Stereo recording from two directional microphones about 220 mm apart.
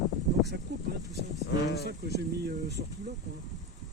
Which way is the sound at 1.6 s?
50° left (ahead or behind).